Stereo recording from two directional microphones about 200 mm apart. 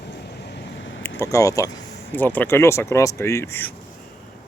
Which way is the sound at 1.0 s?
15° left (ahead or behind).